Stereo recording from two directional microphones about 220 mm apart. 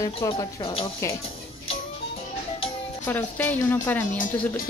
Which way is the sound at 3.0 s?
5° left (ahead or behind).